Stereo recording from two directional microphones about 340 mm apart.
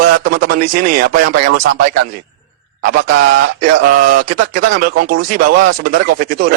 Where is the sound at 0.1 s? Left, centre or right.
Right.